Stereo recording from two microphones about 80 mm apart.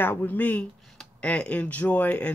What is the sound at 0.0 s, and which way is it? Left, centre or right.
Speech, left.